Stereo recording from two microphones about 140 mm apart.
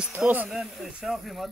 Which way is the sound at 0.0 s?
10° right (ahead or behind).